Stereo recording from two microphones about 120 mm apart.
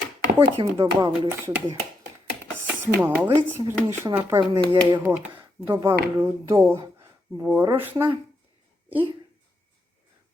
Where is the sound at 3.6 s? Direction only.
25° right (ahead or behind).